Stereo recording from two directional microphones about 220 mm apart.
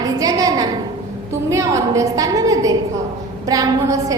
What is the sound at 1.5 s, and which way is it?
A woman's voice, 15° right (ahead or behind).